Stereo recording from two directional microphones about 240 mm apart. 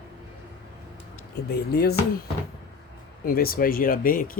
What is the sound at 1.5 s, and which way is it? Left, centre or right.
Speech, left.